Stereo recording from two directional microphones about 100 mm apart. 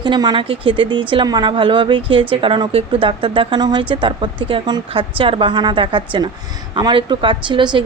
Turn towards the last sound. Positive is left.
turn(degrees=-55)  # may be behind; listen again after turning